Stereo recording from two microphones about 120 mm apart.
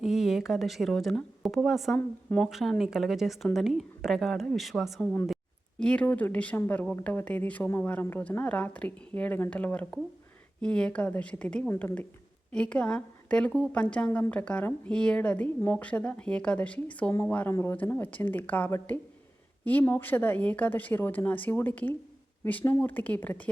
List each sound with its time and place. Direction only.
0.0 s a woman's voice: centre (ahead or behind)
2.0 s a woman's voice: 10° left (ahead or behind)
2.5 s a woman's voice: centre (ahead or behind); by 23.4 s 15° left (ahead or behind)